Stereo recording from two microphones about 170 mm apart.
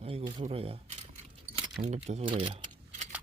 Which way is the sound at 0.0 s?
35° right (ahead or behind).